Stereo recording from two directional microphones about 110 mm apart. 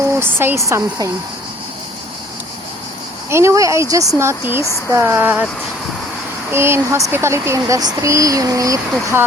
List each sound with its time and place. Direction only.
0.2 s speech: 20° right (ahead or behind)
3.2 s speech: 25° right (ahead or behind)
6.5 s speech: 25° right (ahead or behind)